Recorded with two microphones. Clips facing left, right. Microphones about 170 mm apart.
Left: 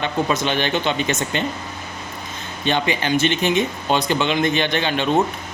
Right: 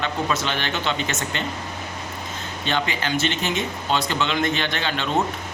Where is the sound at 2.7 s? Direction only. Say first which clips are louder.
Left 5 dB; 20° left (ahead or behind).